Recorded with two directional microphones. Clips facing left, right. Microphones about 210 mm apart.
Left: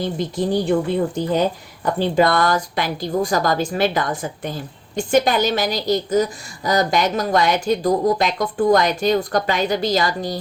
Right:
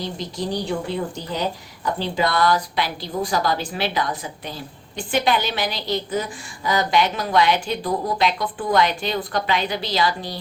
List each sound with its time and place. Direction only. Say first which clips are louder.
0.0 s a woman's voice: left 6 dB; 50° left (ahead or behind)